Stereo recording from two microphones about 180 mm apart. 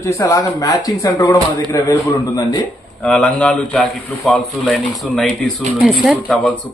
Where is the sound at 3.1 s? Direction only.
5° left (ahead or behind).